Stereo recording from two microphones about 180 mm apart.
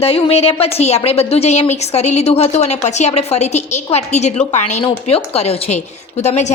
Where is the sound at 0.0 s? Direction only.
35° left (ahead or behind).